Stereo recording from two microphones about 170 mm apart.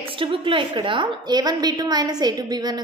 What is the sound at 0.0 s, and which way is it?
A woman's voice, 30° right (ahead or behind).